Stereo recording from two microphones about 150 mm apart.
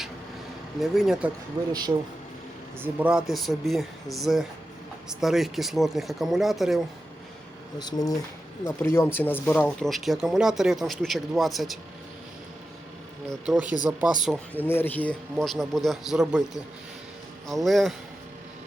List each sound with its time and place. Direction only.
0.8 s speech: 5° right (ahead or behind)
2.8 s speech: 10° right (ahead or behind)
7.8 s speech: 25° left (ahead or behind)
8.6 s speech: 15° left (ahead or behind); by 11.8 s centre (ahead or behind)
13.4 s speech: 5° right (ahead or behind)
14.5 s speech: 15° left (ahead or behind); by 16.4 s 5° right (ahead or behind)
17.5 s speech: centre (ahead or behind)